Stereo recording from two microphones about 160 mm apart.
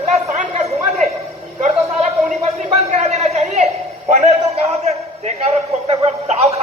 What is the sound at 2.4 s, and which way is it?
A man's voice, 45° right (ahead or behind).